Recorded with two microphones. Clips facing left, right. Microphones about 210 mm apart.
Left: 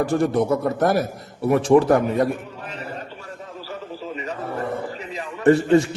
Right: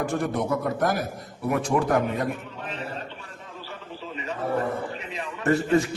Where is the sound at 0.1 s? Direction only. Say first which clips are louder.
Left 6 dB; 30° left (ahead or behind).